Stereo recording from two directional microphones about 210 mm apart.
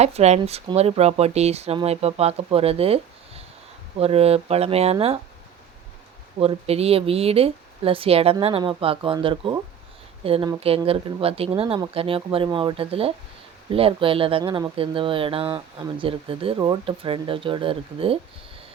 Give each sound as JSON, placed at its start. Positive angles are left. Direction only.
{"t": 0.0, "sound": "speech", "side_deg": -30}
{"t": 6.4, "sound": "speech", "side_deg": -30}